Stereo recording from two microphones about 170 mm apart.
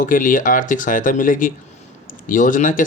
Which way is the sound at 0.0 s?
50° left (ahead or behind).